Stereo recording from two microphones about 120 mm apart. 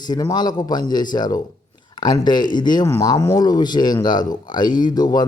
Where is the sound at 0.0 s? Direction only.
35° left (ahead or behind).